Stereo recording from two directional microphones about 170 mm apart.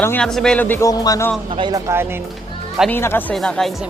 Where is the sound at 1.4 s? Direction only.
30° right (ahead or behind).